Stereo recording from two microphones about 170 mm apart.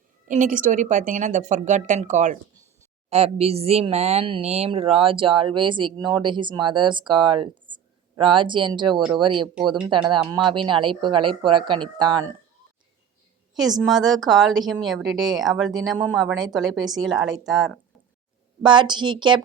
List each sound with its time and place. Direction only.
0.3 s speech: 50° right (ahead or behind); by 12.3 s 25° right (ahead or behind)
13.5 s speech: centre (ahead or behind)
18.6 s speech: 25° right (ahead or behind)